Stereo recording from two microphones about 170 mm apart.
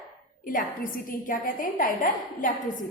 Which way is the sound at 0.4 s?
55° left (ahead or behind).